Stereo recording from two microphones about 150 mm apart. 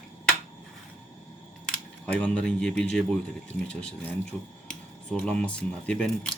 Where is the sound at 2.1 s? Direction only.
5° left (ahead or behind).